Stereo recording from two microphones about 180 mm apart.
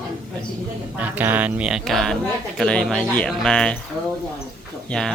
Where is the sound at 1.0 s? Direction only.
10° right (ahead or behind).